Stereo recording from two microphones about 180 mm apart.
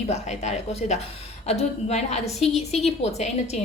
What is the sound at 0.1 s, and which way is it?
A woman's voice, 35° left (ahead or behind).